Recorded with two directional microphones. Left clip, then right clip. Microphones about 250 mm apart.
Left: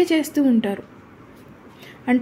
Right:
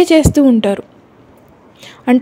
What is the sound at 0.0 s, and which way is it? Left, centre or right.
Speech, right.